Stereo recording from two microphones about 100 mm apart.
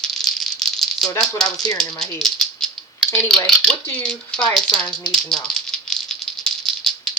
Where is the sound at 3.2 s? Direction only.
5° left (ahead or behind).